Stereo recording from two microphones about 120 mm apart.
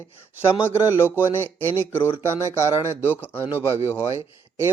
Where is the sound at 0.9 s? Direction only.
15° right (ahead or behind).